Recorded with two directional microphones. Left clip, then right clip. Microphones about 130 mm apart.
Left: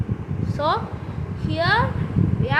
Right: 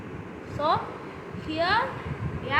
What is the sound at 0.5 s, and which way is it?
A woman's voice, 90° left.